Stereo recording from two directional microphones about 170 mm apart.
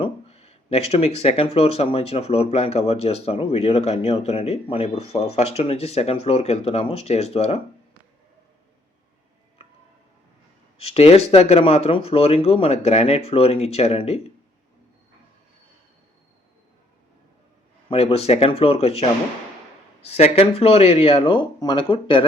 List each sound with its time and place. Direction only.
0.0 s speech: 35° left (ahead or behind)
9.6 s a sound: 35° left (ahead or behind)
10.8 s speech: 35° left (ahead or behind)
17.9 s speech: 35° left (ahead or behind)
20.1 s speech: 40° left (ahead or behind)